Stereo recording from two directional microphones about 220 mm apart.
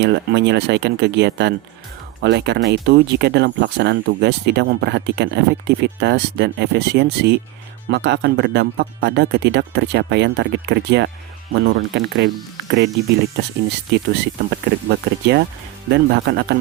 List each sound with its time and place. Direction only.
0.0 s speech: 50° right (ahead or behind)
13.3 s speech: 50° right (ahead or behind)